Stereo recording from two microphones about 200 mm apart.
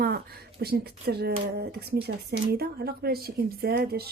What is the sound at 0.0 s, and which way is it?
Speech, 50° right (ahead or behind).